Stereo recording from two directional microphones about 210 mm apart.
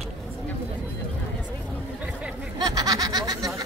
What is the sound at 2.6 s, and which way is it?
Snicker, 20° right (ahead or behind).